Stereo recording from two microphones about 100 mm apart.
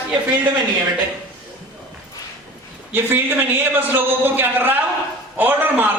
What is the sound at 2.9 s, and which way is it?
A man's voice, 20° right (ahead or behind).